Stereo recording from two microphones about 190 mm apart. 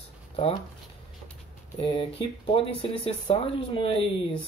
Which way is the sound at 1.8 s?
30° left (ahead or behind).